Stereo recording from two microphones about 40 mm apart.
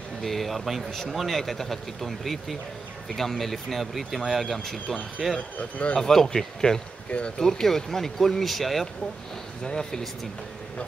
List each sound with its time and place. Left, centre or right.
0.2 s speech: centre
5.6 s speech: left
5.9 s speech: centre
7.1 s speech: left
7.3 s speech: centre
9.6 s speech: centre